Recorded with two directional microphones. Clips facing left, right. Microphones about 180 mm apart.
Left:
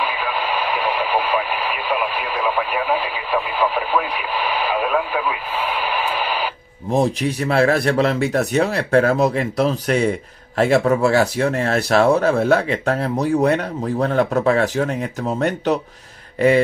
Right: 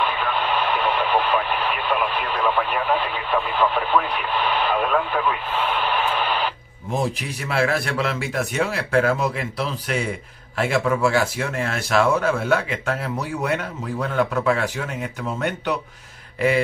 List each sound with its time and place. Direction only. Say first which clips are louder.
0.0 s radio: even; 5° left (ahead or behind)
6.9 s speech: left 7 dB; 40° left (ahead or behind)